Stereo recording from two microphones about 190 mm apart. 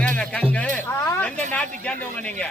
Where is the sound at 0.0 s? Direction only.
5° left (ahead or behind).